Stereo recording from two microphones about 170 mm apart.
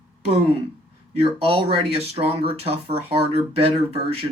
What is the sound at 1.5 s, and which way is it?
Speech, 35° right (ahead or behind).